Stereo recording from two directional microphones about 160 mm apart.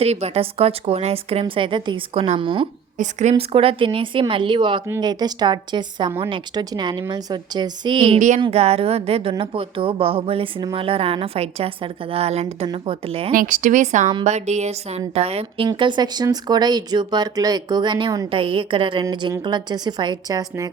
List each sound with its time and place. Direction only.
0.0 s a woman's voice: 40° right (ahead or behind)
3.0 s a woman's voice: 45° right (ahead or behind)
13.3 s a woman's voice: 55° right (ahead or behind); by 20.7 s 25° right (ahead or behind)